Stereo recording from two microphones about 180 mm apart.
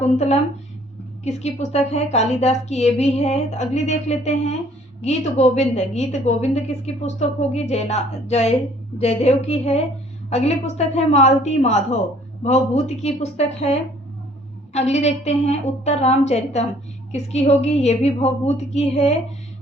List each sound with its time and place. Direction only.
0.0 s a woman's voice: 40° left (ahead or behind)